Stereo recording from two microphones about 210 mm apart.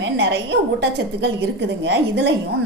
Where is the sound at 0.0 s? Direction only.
60° right (ahead or behind).